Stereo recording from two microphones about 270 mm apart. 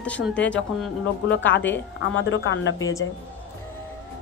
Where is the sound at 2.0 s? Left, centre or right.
Left.